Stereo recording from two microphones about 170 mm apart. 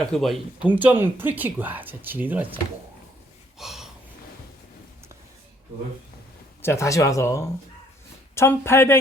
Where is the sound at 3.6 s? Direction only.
Centre (ahead or behind).